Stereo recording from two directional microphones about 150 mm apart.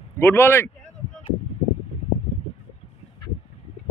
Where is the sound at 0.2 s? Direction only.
15° left (ahead or behind).